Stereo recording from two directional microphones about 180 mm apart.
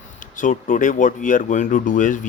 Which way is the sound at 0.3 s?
50° left (ahead or behind).